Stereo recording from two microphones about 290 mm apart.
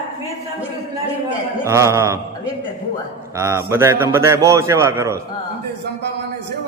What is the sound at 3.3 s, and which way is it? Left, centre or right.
Mantra, centre.